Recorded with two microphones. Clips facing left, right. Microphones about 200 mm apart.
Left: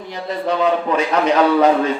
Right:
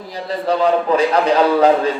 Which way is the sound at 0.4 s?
35° right (ahead or behind).